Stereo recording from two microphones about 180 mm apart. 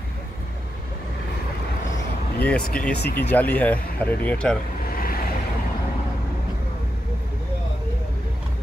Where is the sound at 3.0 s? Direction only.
60° left (ahead or behind).